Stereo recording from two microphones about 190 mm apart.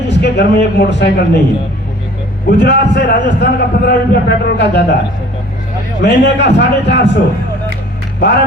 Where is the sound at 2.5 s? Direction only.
65° left (ahead or behind).